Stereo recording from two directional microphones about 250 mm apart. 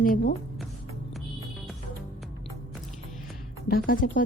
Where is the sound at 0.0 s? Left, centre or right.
Left.